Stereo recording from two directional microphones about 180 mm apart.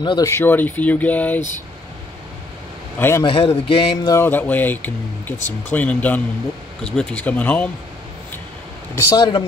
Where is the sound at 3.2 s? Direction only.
30° left (ahead or behind); by 7.7 s 10° left (ahead or behind).